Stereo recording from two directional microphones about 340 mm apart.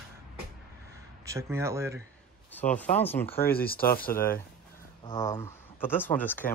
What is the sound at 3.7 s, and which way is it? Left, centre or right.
Speech, left.